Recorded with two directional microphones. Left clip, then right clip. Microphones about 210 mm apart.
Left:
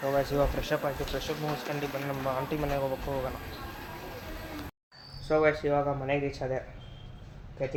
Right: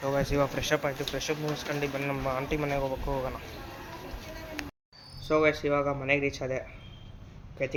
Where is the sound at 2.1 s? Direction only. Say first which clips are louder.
Right 1 dB; 15° right (ahead or behind).